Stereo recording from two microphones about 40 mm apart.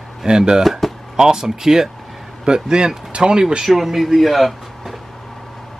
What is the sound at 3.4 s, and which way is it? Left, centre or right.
A man's voice, centre.